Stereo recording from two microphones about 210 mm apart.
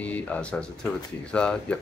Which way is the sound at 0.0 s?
5° left (ahead or behind).